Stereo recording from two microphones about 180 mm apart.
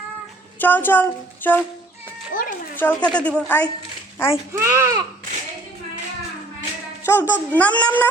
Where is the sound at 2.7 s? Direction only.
10° left (ahead or behind).